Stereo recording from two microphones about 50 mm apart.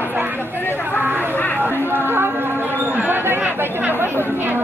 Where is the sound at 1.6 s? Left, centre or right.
Right.